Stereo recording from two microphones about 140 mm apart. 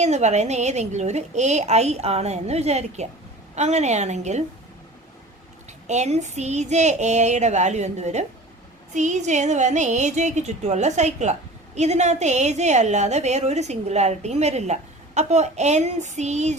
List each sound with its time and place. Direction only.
0.0 s a woman's voice: 55° right (ahead or behind)
5.9 s a woman's voice: 55° right (ahead or behind)